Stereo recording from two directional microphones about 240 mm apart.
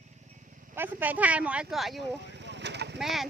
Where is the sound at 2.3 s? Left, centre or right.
Right.